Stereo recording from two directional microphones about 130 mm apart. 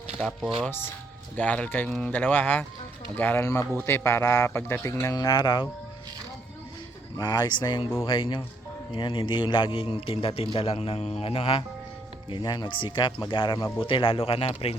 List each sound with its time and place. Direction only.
0.2 s speech: centre (ahead or behind)
1.4 s speech: 10° left (ahead or behind)
5.1 s speech: 30° left (ahead or behind)
7.2 s a man's voice: 30° left (ahead or behind); by 11.6 s 45° left (ahead or behind)
12.3 s a man's voice: 35° left (ahead or behind)